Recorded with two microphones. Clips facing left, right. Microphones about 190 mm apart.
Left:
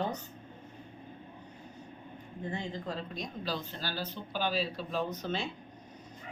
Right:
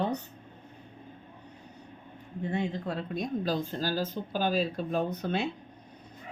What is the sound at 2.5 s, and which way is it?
Speech, 65° right (ahead or behind).